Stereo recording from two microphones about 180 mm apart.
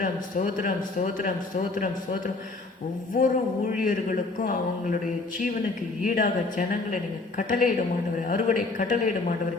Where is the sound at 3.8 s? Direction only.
50° left (ahead or behind).